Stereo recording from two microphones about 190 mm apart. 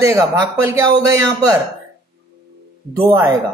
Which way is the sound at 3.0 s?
15° right (ahead or behind).